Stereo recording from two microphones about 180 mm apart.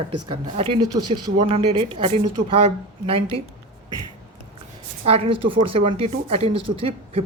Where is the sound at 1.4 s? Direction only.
35° right (ahead or behind).